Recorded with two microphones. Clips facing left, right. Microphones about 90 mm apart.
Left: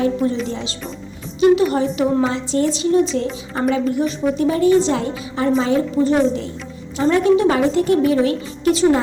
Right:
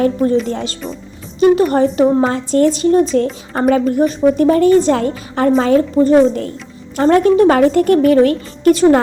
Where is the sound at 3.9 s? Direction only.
45° right (ahead or behind).